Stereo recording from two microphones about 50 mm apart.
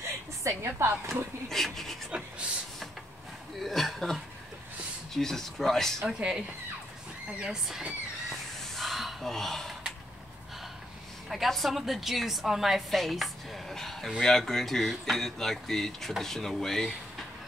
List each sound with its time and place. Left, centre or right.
0.4 s a woman's voice: right
1.5 s speech: centre
2.0 s a sound: right
3.6 s a woman's voice: centre
6.0 s speech: centre
7.4 s speech: centre
8.7 s a sound: centre
11.2 s a woman's voice: centre
13.0 s a sound: centre
14.2 s speech: centre